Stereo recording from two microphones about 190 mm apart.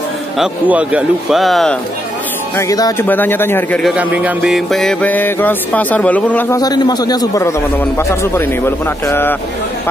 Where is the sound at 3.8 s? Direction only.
5° right (ahead or behind).